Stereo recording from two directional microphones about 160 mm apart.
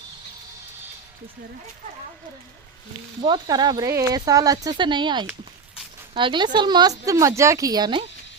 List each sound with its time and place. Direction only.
3.2 s speech: 30° right (ahead or behind)